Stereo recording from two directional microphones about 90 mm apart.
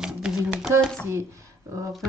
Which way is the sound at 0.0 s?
10° right (ahead or behind).